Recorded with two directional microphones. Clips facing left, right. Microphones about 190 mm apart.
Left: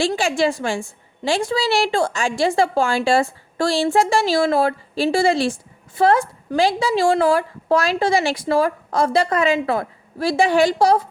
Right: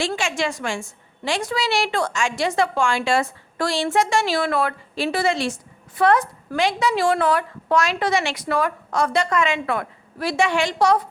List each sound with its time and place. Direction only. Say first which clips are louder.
0.2 s a woman's voice: left 5 dB; 35° left (ahead or behind)